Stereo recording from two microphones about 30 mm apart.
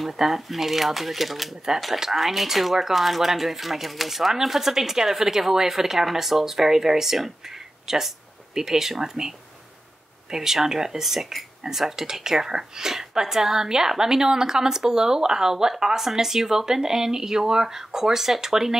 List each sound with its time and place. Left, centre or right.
0.0 s speech: centre
10.3 s a woman's voice: centre